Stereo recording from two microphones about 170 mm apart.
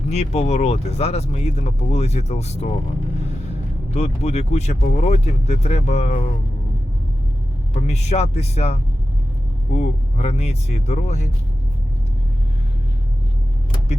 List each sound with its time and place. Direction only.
0.1 s speech: 40° left (ahead or behind)
3.9 s speech: 40° left (ahead or behind)
7.7 s speech: 40° left (ahead or behind)